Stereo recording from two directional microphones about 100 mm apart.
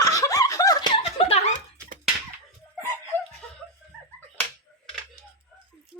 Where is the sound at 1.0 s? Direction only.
80° left.